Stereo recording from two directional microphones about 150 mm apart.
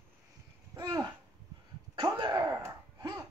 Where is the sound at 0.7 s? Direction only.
25° right (ahead or behind).